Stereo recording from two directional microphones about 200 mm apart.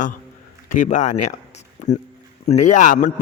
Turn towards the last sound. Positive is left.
turn(degrees=40)  # may be behind; listen again after turning